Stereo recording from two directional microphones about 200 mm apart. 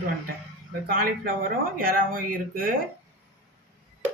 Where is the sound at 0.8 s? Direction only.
45° right (ahead or behind).